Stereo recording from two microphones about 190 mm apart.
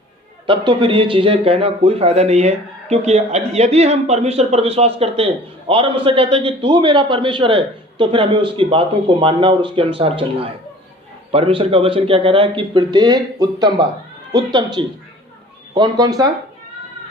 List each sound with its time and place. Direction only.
0.4 s a man's voice: 25° right (ahead or behind)